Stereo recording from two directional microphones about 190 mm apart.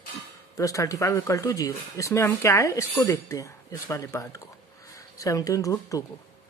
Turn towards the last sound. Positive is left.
turn(degrees=15)  # may be behind; listen again after turning